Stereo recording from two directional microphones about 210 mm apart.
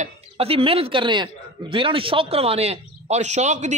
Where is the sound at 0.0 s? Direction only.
30° right (ahead or behind).